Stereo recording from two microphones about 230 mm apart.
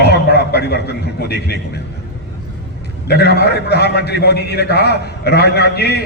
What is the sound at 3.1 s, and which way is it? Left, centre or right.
A man's voice, left.